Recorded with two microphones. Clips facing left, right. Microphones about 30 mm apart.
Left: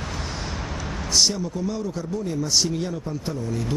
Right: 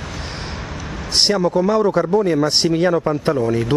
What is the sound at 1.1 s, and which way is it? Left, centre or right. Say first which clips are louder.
Speech: right 6 dB; right.